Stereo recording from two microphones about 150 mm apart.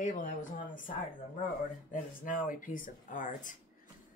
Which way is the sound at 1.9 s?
65° left (ahead or behind).